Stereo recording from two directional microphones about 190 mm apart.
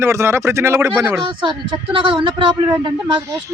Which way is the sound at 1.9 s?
25° right (ahead or behind).